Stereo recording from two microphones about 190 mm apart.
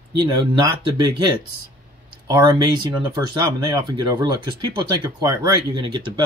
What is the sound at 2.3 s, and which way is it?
Speech, 20° right (ahead or behind).